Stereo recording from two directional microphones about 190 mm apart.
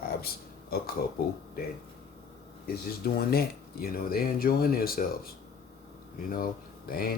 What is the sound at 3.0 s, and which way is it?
Speech, 55° left (ahead or behind).